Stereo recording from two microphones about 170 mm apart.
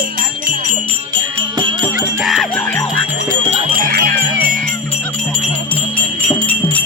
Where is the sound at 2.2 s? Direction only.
Centre (ahead or behind).